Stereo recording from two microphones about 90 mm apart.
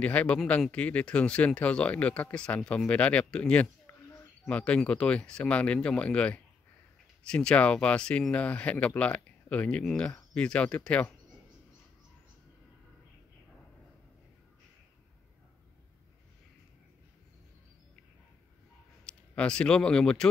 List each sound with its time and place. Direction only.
0.0 s speech: 15° left (ahead or behind)
19.0 s speech: 10° left (ahead or behind)